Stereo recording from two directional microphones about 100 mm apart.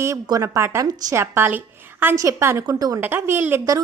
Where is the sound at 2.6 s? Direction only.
40° right (ahead or behind).